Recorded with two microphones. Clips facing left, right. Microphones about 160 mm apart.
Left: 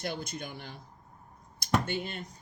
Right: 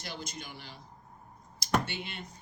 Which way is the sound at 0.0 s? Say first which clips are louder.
Left 6 dB; 55° left (ahead or behind).